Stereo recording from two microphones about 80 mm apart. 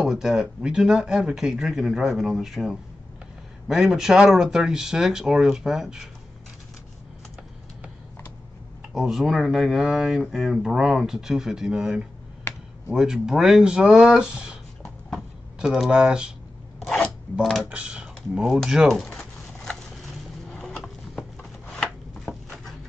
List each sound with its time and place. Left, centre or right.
0.0 s speech: centre
8.8 s speech: centre
12.5 s a sound: left
12.8 s speech: centre
15.0 s a sound: centre
17.4 s speech: centre
17.6 s speech: centre
19.1 s a sound: centre
20.5 s shuffling cards: centre